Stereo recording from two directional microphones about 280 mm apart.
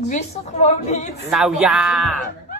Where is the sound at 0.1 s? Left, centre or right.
Left.